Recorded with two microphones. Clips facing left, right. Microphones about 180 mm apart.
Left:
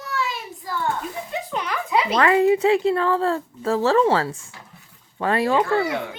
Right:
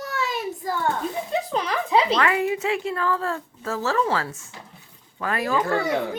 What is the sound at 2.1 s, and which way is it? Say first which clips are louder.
A woman's voice: left 5 dB; 35° left (ahead or behind).